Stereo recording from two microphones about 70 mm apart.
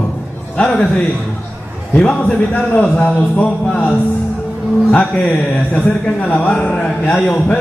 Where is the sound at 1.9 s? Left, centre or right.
Centre.